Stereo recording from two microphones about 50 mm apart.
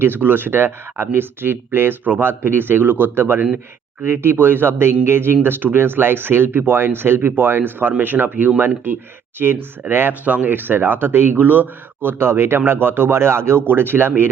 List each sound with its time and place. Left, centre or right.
0.0 s speech: right
10.2 s speech: right
12.2 s speech: right